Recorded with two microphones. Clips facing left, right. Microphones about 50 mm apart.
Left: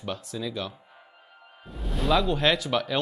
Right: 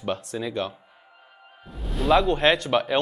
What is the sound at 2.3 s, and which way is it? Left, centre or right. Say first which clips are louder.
Speech: right 4 dB; right.